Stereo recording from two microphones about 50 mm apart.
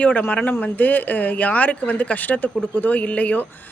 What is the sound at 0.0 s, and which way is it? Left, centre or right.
Speech, left.